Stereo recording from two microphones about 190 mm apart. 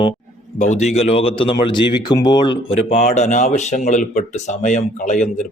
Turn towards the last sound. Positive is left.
turn(degrees=40)  # may be behind; listen again after turning